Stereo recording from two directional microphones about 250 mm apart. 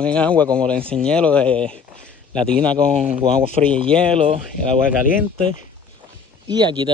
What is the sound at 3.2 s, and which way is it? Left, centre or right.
Speech, right.